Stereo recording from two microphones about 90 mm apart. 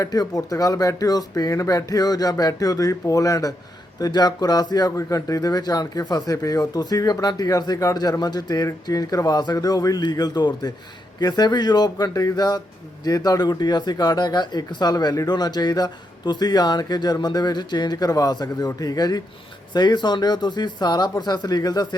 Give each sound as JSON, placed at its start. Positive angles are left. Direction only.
{"t": 0.0, "sound": "speech", "side_deg": 45}